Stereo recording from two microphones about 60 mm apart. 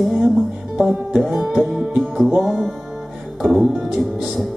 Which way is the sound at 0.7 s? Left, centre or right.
Centre.